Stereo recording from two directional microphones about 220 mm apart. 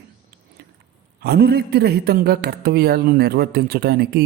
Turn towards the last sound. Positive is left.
turn(degrees=-45)  # may be behind; listen again after turning